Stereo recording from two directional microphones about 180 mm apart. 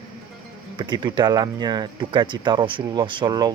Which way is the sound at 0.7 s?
25° right (ahead or behind).